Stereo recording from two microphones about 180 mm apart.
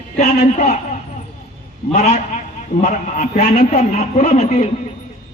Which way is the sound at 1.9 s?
40° left (ahead or behind).